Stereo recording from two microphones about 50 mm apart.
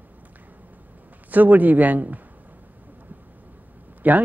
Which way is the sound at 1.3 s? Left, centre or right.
Right.